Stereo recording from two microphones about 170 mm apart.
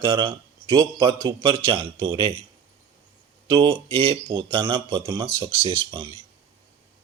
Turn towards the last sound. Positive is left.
turn(degrees=-30)  # may be behind; listen again after turning